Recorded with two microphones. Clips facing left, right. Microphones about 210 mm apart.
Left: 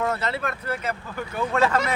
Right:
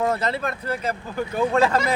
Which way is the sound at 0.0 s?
40° right (ahead or behind).